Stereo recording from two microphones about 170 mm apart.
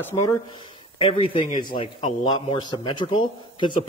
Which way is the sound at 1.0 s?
30° left (ahead or behind).